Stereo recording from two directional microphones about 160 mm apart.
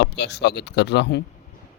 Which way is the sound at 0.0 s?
90° left.